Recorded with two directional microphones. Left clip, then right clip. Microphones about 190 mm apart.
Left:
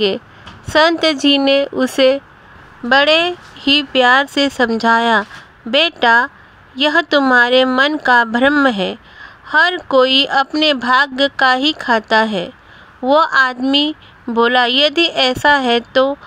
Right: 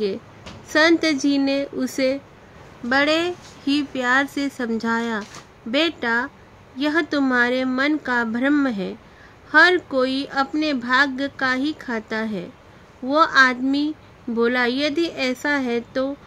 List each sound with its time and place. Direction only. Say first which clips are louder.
0.7 s speech: left 5 dB; 35° left (ahead or behind)